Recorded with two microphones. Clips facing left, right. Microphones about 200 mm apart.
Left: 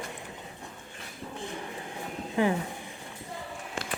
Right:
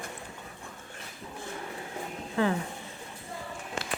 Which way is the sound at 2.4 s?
15° left (ahead or behind).